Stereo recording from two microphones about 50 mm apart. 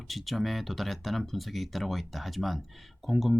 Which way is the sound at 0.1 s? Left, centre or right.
Centre.